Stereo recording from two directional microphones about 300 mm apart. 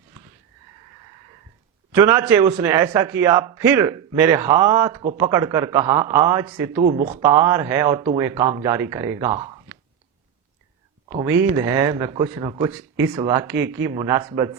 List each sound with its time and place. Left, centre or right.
1.9 s a man's voice: centre
6.8 s speech: right
7.2 s a man's voice: centre
11.4 s a man's voice: centre